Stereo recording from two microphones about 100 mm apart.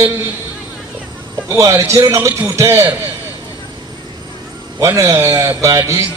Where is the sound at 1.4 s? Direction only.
30° right (ahead or behind).